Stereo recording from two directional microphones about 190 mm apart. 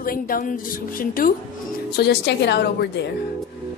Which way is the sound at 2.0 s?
60° left (ahead or behind).